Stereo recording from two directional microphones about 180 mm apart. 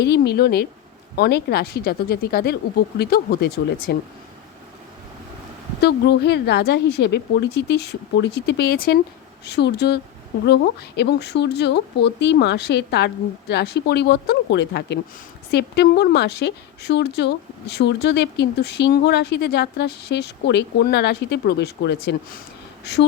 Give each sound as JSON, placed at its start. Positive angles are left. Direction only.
{"t": 0.0, "sound": "speech", "side_deg": 65}
{"t": 5.8, "sound": "speech", "side_deg": 70}